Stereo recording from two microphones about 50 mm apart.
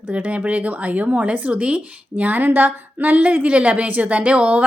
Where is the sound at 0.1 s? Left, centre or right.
Right.